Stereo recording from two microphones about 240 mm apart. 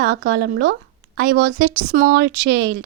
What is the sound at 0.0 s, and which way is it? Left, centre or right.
A woman's voice, right.